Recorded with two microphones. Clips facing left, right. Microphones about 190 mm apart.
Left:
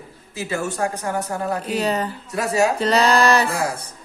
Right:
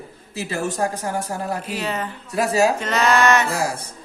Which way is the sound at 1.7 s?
35° left (ahead or behind).